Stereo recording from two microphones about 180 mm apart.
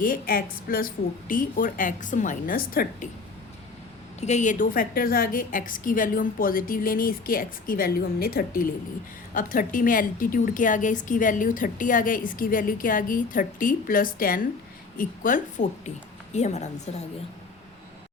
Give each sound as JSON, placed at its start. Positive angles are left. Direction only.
{"t": 0.0, "sound": "a woman's voice", "side_deg": 50}
{"t": 4.2, "sound": "a woman's voice", "side_deg": 40}